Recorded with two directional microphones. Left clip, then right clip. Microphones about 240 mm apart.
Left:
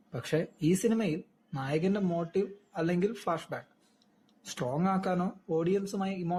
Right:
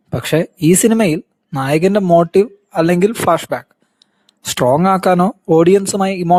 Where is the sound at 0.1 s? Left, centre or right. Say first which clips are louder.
Right 16 dB; right.